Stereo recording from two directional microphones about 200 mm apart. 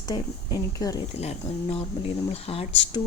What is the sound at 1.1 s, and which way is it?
Speech, 30° left (ahead or behind).